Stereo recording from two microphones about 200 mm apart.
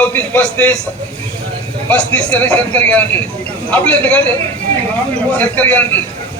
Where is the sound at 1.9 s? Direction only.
5° left (ahead or behind).